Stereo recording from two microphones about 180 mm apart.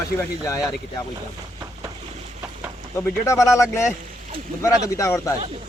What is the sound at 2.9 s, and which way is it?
Speech, 15° left (ahead or behind).